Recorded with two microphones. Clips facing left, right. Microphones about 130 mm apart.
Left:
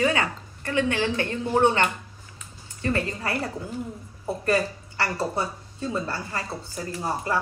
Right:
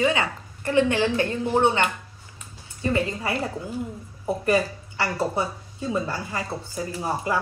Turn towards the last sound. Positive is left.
turn(degrees=-15)  # may be behind; listen again after turning